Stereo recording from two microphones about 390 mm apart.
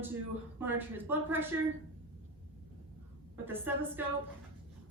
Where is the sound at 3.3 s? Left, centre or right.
Centre.